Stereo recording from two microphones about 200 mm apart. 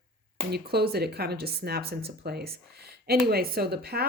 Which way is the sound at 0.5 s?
50° right (ahead or behind).